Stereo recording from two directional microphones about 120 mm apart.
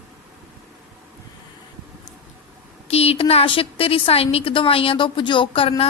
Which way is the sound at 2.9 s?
55° left (ahead or behind).